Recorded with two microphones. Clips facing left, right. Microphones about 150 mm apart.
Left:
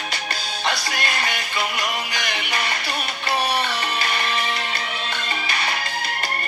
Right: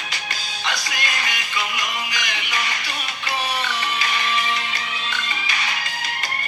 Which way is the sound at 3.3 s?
60° left (ahead or behind).